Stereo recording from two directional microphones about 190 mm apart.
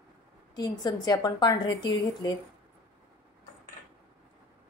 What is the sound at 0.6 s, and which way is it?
A woman's voice, 20° left (ahead or behind).